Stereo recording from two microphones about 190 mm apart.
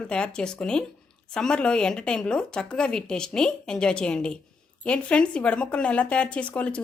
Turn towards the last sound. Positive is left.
turn(degrees=5)  # may be behind; listen again after turning